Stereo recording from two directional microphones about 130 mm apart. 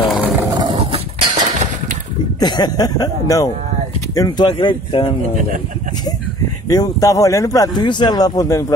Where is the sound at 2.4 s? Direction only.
35° left (ahead or behind).